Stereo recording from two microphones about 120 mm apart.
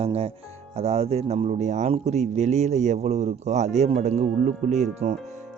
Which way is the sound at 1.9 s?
65° right (ahead or behind).